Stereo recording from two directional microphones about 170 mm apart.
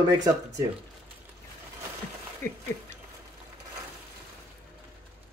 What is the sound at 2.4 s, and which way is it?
Speech, 15° left (ahead or behind).